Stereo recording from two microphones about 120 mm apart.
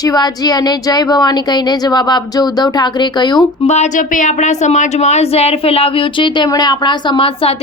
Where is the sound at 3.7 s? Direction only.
80° left; by 7.3 s 40° left (ahead or behind).